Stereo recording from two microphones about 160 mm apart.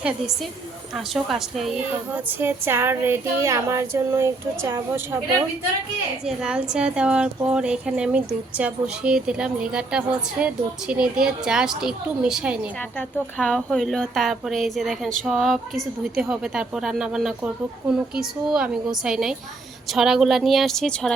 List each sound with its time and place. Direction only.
0.9 s a woman's voice: centre (ahead or behind)
1.9 s speech: 15° right (ahead or behind)
6.2 s a woman's voice: 5° right (ahead or behind)
13.0 s a woman's voice: 5° left (ahead or behind)